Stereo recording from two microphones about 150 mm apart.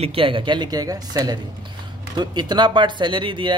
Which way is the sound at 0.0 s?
40° right (ahead or behind).